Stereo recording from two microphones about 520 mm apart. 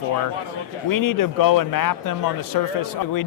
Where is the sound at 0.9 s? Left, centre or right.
Left.